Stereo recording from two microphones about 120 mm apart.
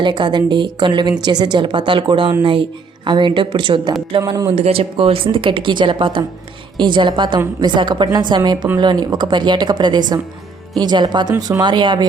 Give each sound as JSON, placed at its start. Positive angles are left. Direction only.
{"t": 0.0, "sound": "a woman's voice", "side_deg": -40}
{"t": 4.3, "sound": "a woman's voice", "side_deg": -30}
{"t": 4.5, "sound": "a woman's voice", "side_deg": -60}